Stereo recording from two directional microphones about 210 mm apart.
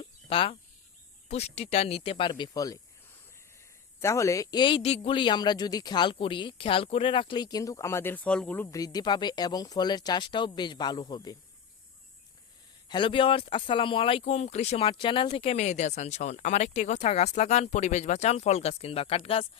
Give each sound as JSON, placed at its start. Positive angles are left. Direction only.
{"t": 0.0, "sound": "a sound", "side_deg": 25}
{"t": 1.3, "sound": "a man's voice", "side_deg": 30}
{"t": 4.0, "sound": "a man's voice", "side_deg": 15}
{"t": 12.9, "sound": "speech", "side_deg": 25}